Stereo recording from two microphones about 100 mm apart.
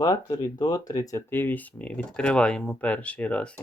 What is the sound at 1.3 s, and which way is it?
Speech, 20° left (ahead or behind).